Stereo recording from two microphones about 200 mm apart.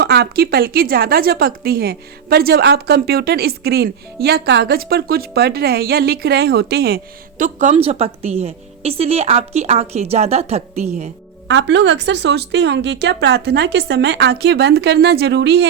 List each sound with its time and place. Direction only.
0.0 s a woman's voice: 55° right (ahead or behind); by 11.1 s 35° right (ahead or behind)
11.4 s a woman's voice: 65° right (ahead or behind)